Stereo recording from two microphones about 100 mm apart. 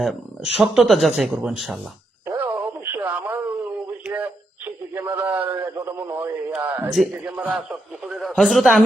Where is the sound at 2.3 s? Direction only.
20° right (ahead or behind).